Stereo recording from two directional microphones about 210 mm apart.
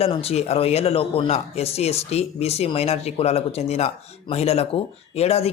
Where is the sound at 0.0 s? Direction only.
30° left (ahead or behind).